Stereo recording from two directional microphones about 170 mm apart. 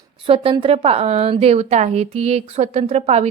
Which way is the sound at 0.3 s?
30° right (ahead or behind).